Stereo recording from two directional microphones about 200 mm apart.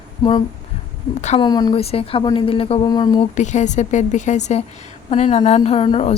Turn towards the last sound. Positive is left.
turn(degrees=30)  # may be behind; listen again after turning